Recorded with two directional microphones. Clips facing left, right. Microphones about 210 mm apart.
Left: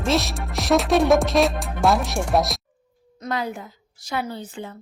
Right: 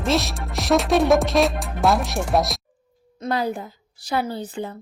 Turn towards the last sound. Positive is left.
turn(degrees=-35)  # may be behind; listen again after turning